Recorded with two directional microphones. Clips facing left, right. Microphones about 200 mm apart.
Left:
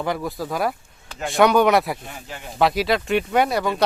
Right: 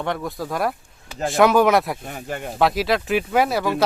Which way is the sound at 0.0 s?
Centre (ahead or behind).